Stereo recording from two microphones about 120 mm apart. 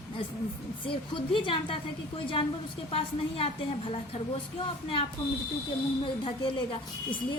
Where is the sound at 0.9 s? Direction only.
45° left (ahead or behind).